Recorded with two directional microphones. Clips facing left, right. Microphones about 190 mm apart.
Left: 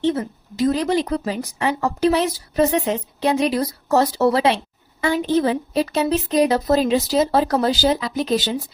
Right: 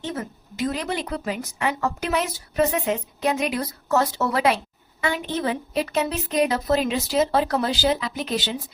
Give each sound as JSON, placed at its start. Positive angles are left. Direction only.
{"t": 0.0, "sound": "a woman's voice", "side_deg": 35}